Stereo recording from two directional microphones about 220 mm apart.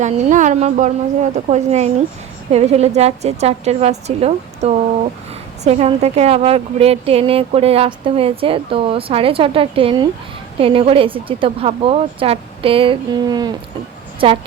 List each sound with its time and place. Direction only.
0.0 s a woman's voice: 35° right (ahead or behind)